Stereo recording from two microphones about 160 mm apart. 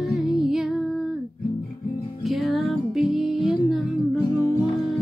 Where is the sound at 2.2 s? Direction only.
Centre (ahead or behind).